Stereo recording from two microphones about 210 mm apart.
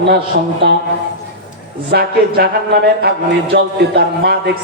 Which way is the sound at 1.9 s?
50° right (ahead or behind).